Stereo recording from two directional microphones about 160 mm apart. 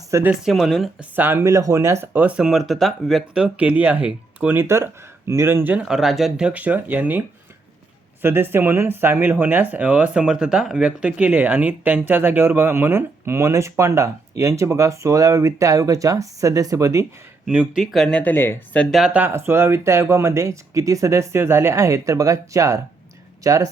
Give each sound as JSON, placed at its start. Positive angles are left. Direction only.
{"t": 0.1, "sound": "speech", "side_deg": -15}
{"t": 0.4, "sound": "speech", "side_deg": 0}
{"t": 1.1, "sound": "speech", "side_deg": -15}
{"t": 17.4, "sound": "speech", "side_deg": -5}